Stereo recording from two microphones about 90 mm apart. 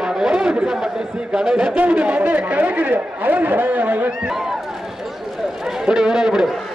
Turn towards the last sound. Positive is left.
turn(degrees=-5)  # may be behind; listen again after turning